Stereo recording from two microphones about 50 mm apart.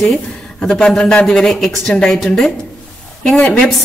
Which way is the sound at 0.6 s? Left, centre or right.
Centre.